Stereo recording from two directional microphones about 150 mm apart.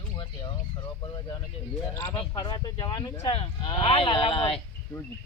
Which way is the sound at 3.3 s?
35° left (ahead or behind).